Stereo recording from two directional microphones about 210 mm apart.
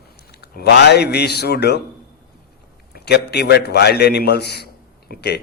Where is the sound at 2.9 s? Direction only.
50° left (ahead or behind).